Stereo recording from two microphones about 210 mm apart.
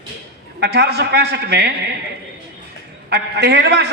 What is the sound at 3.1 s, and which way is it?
Speech, 50° right (ahead or behind).